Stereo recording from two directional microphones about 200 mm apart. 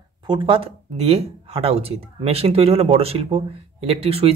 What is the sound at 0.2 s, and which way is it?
Speech, 25° right (ahead or behind).